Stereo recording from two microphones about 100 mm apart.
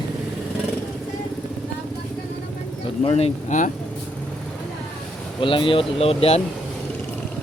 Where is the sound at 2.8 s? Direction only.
90° left.